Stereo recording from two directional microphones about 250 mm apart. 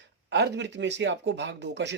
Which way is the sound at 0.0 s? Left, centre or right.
Right.